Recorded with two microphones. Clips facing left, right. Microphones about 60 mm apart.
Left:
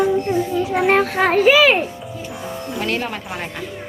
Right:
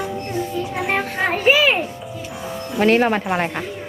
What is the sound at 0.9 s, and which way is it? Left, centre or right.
Music, left.